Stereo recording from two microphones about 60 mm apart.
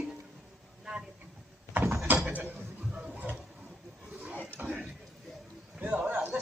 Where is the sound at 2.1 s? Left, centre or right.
Right.